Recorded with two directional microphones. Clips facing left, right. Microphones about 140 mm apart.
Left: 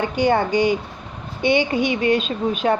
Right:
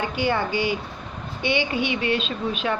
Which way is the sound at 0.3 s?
45° left (ahead or behind).